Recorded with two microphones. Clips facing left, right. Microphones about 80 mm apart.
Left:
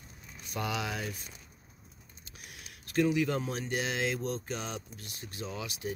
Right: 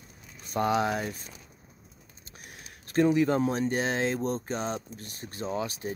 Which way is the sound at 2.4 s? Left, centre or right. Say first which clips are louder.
Right 3 dB; right.